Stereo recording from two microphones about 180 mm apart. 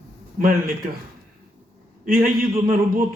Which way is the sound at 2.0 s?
50° right (ahead or behind).